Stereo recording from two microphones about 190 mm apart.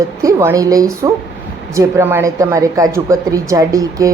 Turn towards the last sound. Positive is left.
turn(degrees=-15)  # may be behind; listen again after turning